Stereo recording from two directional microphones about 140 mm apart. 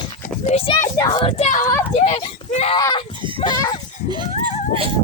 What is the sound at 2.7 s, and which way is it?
Speech, 30° left (ahead or behind).